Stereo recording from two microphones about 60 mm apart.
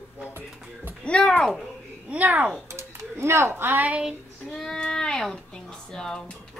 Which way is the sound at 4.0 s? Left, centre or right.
Centre.